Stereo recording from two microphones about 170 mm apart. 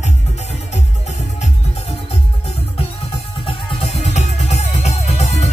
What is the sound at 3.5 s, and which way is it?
Music, 35° left (ahead or behind).